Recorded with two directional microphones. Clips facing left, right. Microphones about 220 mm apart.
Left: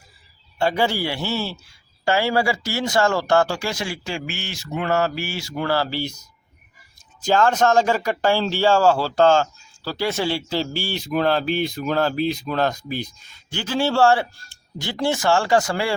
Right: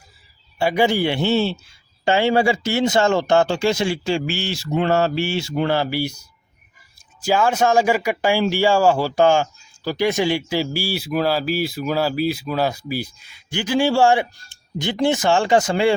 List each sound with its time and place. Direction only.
0.6 s speech: 15° right (ahead or behind)